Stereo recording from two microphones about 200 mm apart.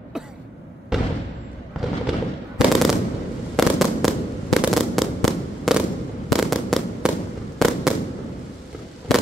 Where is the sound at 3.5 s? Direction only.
Centre (ahead or behind).